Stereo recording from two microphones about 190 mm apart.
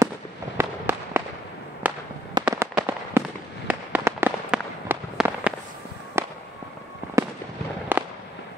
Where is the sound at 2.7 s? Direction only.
10° right (ahead or behind).